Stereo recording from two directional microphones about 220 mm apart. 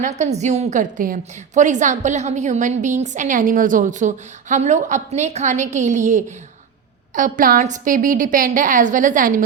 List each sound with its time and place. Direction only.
0.0 s a woman's voice: 30° right (ahead or behind)